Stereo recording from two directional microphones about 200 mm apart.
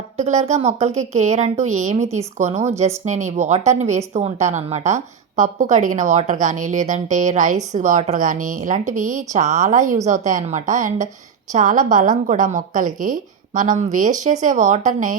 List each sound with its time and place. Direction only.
0.2 s speech: 35° right (ahead or behind)